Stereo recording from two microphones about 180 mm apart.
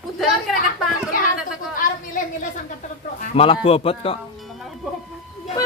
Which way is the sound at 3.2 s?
35° left (ahead or behind).